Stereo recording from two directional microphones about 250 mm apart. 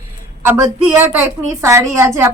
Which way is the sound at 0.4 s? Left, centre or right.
Centre.